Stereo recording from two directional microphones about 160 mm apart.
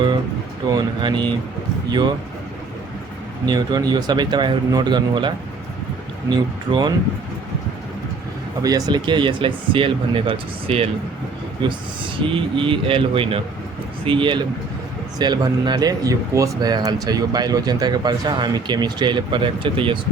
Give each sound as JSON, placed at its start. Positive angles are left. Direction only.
{"t": 0.7, "sound": "speech", "side_deg": -25}
{"t": 3.4, "sound": "speech", "side_deg": -25}
{"t": 6.3, "sound": "speech", "side_deg": -25}
{"t": 8.6, "sound": "speech", "side_deg": -25}